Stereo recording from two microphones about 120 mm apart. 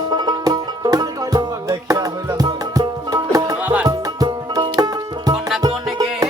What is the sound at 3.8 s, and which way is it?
Music, 30° right (ahead or behind).